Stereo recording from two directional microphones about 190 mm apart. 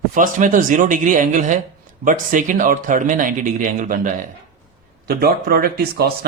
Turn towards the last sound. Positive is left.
turn(degrees=-55)  # may be behind; listen again after turning